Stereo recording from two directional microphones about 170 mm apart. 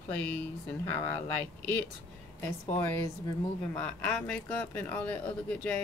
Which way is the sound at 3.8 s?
5° left (ahead or behind).